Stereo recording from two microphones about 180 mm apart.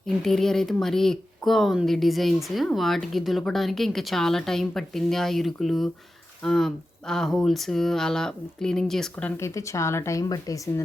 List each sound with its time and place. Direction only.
0.3 s speech: centre (ahead or behind)
9.4 s speech: 15° left (ahead or behind)